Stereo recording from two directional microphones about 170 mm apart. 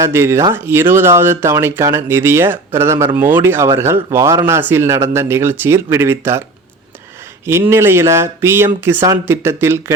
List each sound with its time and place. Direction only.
0.0 s speech: 15° right (ahead or behind)
7.4 s speech: 15° right (ahead or behind)